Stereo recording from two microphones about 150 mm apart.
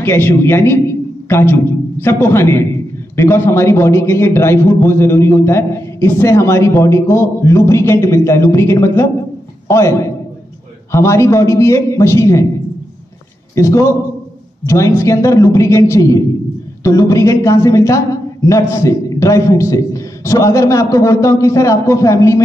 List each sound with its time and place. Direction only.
0.0 s a man's voice: 15° left (ahead or behind)
13.6 s a woman's voice: 20° left (ahead or behind)